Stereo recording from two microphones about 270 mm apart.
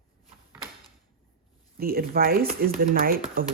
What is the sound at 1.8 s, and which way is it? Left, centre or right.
Speech, right.